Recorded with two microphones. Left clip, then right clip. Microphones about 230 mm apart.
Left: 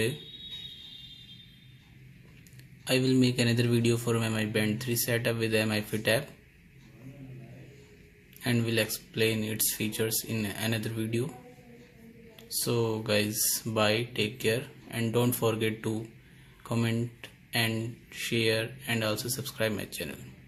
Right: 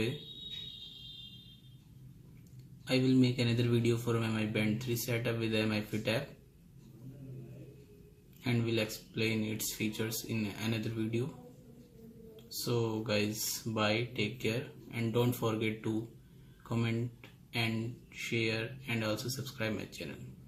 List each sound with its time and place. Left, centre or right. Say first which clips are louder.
2.8 s speech: left 4 dB; left
8.4 s speech: left 5 dB; left
12.5 s speech: left 5 dB; left
16.6 s a sound: left 5 dB; left
18.1 s speech: left 6 dB; left